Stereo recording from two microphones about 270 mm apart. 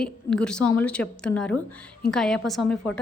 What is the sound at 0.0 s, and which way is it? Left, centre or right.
A woman's voice, centre.